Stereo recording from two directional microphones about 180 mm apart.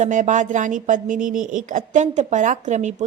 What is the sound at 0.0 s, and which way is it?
A woman's voice, 45° right (ahead or behind).